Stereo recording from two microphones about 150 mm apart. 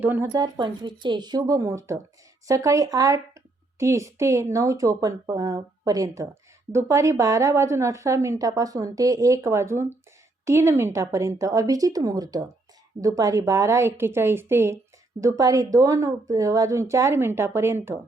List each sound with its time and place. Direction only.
0.0 s a woman's voice: 15° right (ahead or behind)